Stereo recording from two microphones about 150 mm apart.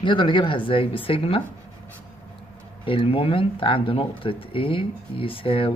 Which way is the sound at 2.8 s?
35° left (ahead or behind).